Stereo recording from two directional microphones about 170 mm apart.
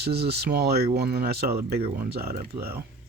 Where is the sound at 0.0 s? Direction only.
70° right (ahead or behind).